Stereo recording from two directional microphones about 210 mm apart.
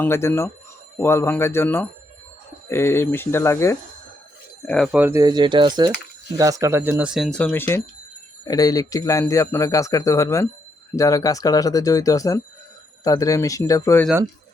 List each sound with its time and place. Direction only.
0.0 s a man's voice: 10° left (ahead or behind)
4.9 s a man's voice: 10° right (ahead or behind); by 14.1 s 10° left (ahead or behind)